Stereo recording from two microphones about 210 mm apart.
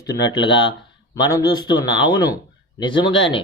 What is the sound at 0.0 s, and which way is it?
Speech, 15° left (ahead or behind).